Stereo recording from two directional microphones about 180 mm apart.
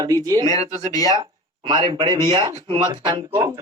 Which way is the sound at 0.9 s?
20° left (ahead or behind).